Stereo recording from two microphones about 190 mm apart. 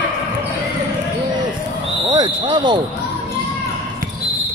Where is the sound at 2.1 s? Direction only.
25° right (ahead or behind).